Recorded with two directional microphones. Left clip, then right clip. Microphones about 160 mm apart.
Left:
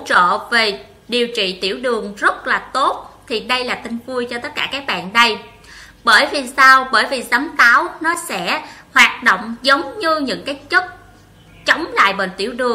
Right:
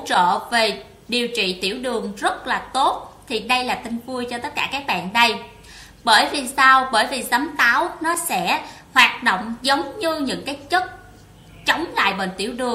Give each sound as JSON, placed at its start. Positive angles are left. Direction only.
{"t": 0.0, "sound": "a woman's voice", "side_deg": -20}